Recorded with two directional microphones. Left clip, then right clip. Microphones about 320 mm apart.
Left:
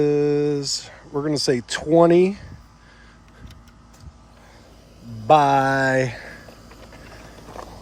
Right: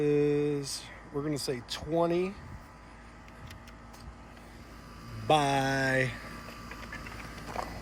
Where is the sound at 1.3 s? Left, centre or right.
Left.